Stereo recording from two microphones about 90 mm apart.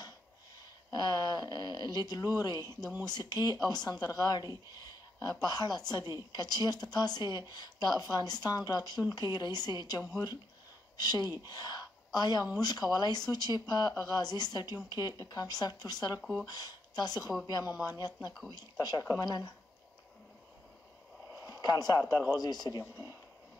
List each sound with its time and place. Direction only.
0.9 s a woman's voice: 50° left (ahead or behind)
4.7 s a sound: 45° left (ahead or behind)
5.4 s a woman's voice: 50° left (ahead or behind)
16.2 s speech: 5° right (ahead or behind)
16.4 s a woman's voice: 50° left (ahead or behind)
21.5 s a woman's voice: 45° left (ahead or behind)